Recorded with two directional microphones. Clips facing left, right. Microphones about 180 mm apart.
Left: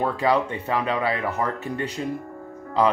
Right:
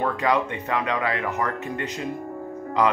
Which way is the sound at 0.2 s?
30° left (ahead or behind).